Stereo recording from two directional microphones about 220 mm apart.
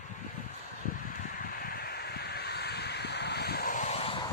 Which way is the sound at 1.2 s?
40° left (ahead or behind).